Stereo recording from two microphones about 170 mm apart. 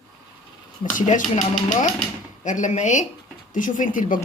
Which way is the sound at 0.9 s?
45° left (ahead or behind).